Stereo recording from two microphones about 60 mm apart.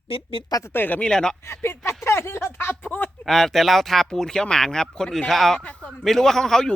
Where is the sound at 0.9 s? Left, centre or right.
Centre.